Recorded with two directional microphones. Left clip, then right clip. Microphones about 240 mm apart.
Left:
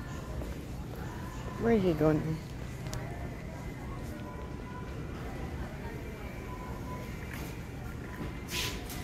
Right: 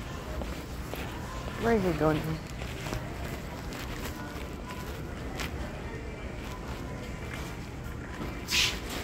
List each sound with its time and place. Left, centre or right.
1.6 s speech: left
8.5 s music: right